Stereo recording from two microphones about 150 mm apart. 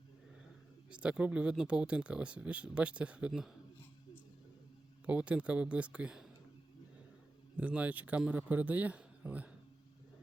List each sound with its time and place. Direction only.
0.9 s speech: 5° right (ahead or behind)
5.0 s speech: 10° right (ahead or behind)
7.5 s speech: 10° right (ahead or behind)